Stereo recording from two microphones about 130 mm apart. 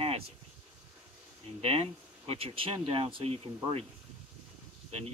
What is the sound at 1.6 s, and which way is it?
Speech, 50° right (ahead or behind).